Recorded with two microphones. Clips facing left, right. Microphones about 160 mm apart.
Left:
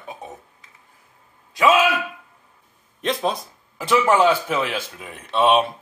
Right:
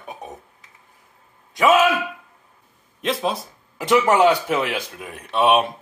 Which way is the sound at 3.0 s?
5° right (ahead or behind).